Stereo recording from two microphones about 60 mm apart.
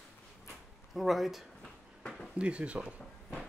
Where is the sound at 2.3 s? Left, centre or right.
Centre.